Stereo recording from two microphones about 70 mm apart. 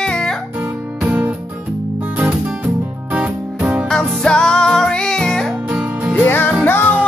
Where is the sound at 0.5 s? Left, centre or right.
Right.